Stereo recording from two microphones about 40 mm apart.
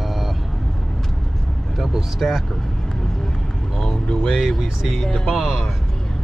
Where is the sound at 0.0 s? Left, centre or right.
Centre.